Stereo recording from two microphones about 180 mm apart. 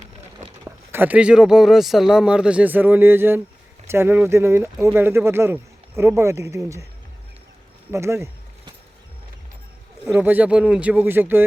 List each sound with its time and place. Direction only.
0.6 s speech: 10° right (ahead or behind)
7.9 s a sound: 15° right (ahead or behind)
10.1 s speech: 10° right (ahead or behind)